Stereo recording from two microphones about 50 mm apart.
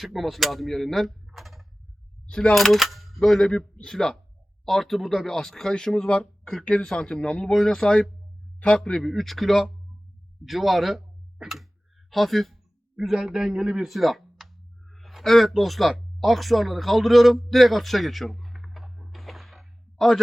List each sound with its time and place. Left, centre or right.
0.0 s speech: centre
2.3 s speech: centre
2.6 s speech: centre
13.3 s a sound: centre